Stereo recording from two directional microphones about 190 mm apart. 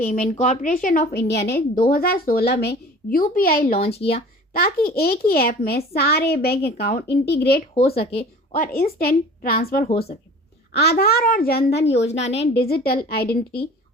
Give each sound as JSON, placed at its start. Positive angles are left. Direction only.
{"t": 0.0, "sound": "a woman's voice", "side_deg": 45}
{"t": 3.8, "sound": "speech", "side_deg": 30}
{"t": 4.5, "sound": "a woman's voice", "side_deg": 55}
{"t": 7.8, "sound": "speech", "side_deg": 30}
{"t": 8.5, "sound": "a woman's voice", "side_deg": 50}
{"t": 12.0, "sound": "speech", "side_deg": 35}
{"t": 12.5, "sound": "speech", "side_deg": 55}